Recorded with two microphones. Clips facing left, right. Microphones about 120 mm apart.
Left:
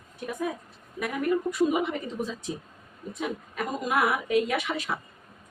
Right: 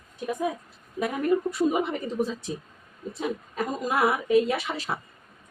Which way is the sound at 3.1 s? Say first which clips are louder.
Right 2 dB; 30° right (ahead or behind).